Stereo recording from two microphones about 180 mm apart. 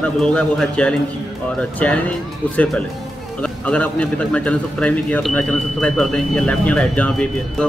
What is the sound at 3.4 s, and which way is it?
A man's voice, 5° left (ahead or behind).